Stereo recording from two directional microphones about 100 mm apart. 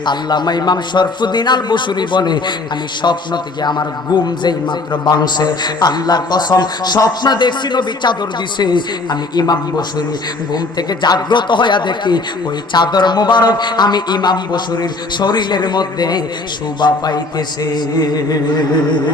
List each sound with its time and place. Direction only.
0.0 s a man's voice: 50° left (ahead or behind)